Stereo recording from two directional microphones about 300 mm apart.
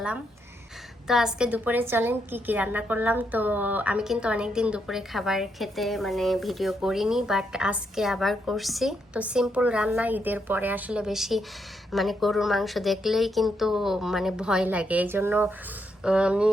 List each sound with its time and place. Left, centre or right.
1.0 s a woman's voice: centre